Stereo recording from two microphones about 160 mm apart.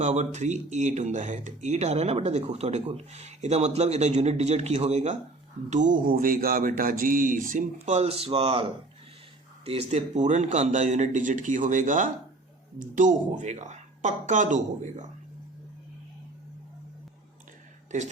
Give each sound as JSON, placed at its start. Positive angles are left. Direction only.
{"t": 0.0, "sound": "speech", "side_deg": -45}
{"t": 5.7, "sound": "speech", "side_deg": -55}